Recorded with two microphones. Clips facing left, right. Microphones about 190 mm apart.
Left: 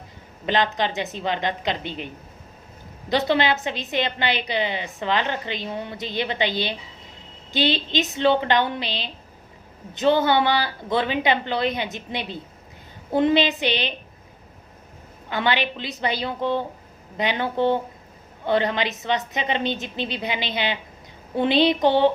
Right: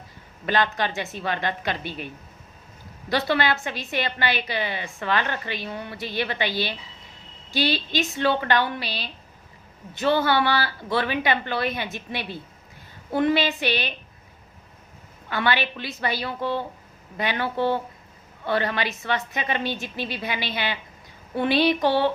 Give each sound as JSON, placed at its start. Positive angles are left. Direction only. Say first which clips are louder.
{"t": 0.4, "sound": "a woman's voice", "louder": "left 2 dB", "side_deg": 20}
{"t": 3.1, "sound": "a woman's voice", "louder": "left 2 dB", "side_deg": 20}
{"t": 15.3, "sound": "a woman's voice", "louder": "left 1 dB", "side_deg": 20}